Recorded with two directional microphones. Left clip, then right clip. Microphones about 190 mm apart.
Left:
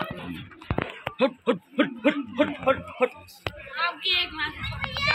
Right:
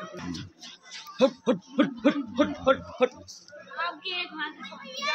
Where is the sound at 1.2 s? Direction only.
55° right (ahead or behind).